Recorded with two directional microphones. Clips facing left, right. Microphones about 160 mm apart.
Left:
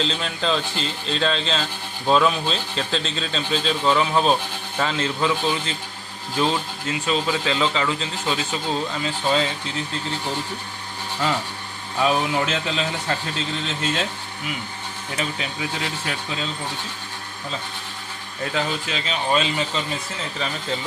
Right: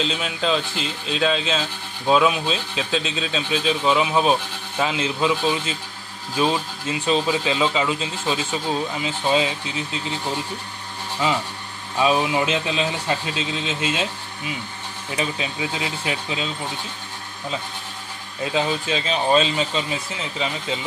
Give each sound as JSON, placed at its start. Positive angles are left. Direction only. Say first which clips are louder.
{"t": 0.0, "sound": "speech", "louder": "right 1 dB", "side_deg": -5}
{"t": 12.0, "sound": "speech", "louder": "right 1 dB", "side_deg": -15}
{"t": 15.1, "sound": "speech", "louder": "right 2 dB", "side_deg": -20}
{"t": 18.4, "sound": "speech", "louder": "right 3 dB", "side_deg": -20}